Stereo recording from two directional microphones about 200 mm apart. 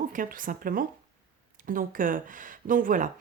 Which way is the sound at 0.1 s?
45° right (ahead or behind).